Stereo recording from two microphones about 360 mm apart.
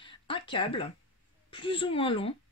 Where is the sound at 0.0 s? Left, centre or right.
Centre.